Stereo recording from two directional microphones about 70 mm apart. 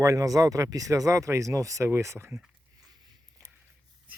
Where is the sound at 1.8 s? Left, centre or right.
Right.